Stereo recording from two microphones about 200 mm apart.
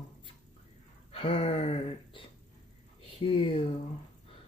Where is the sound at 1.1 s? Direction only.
30° left (ahead or behind).